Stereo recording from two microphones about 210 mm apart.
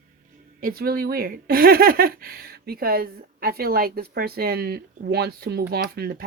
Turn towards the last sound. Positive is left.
turn(degrees=-50)  # may be behind; listen again after turning